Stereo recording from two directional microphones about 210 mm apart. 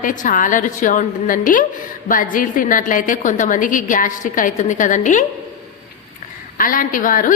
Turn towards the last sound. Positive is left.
turn(degrees=40)  # may be behind; listen again after turning